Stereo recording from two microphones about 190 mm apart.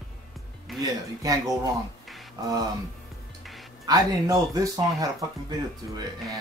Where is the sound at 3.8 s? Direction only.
20° right (ahead or behind).